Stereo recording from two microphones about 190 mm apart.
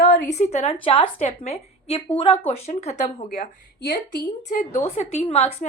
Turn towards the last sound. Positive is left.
turn(degrees=30)  # may be behind; listen again after turning